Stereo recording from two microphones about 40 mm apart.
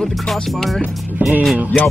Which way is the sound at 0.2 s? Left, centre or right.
Centre.